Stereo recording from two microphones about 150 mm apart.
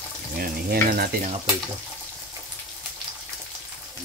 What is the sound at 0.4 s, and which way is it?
Frying, 85° right.